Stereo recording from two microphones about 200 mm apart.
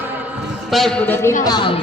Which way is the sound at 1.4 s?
20° left (ahead or behind).